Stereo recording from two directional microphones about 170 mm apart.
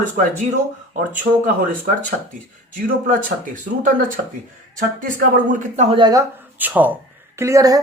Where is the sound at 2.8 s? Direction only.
50° right (ahead or behind).